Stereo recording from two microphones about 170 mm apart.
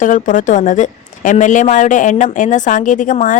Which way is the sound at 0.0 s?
50° left (ahead or behind).